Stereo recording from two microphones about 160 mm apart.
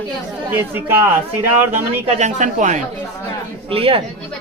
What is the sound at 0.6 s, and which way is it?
Speech, 15° right (ahead or behind).